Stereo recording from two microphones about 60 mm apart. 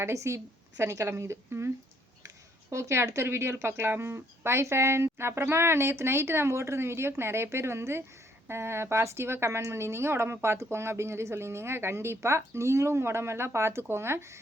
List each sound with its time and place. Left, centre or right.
0.0 s speech: right
2.2 s speech: right